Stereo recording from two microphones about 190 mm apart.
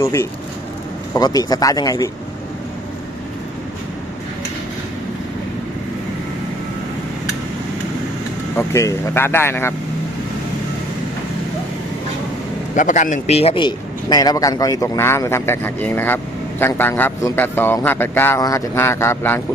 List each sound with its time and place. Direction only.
0.0 s a man's voice: 15° left (ahead or behind)
8.5 s a man's voice: 15° left (ahead or behind)
12.7 s a man's voice: 40° left (ahead or behind); by 19.4 s 10° left (ahead or behind)